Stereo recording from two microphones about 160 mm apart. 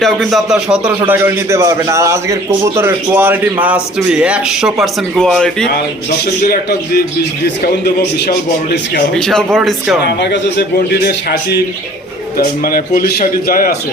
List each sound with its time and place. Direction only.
0.0 s speech: centre (ahead or behind)
6.5 s speech: 75° left (ahead or behind)
9.1 s speech: 5° left (ahead or behind)
10.0 s speech: 90° left
11.0 s a man's voice: 80° left
12.4 s a man's voice: 65° left (ahead or behind)